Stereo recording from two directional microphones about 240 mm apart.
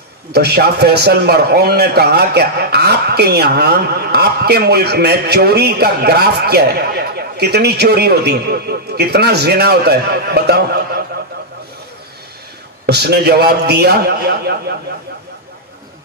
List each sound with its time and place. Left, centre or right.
0.3 s a man's voice: right
12.8 s a man's voice: right